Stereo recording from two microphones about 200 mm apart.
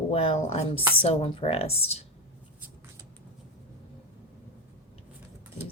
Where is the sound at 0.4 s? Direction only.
30° left (ahead or behind).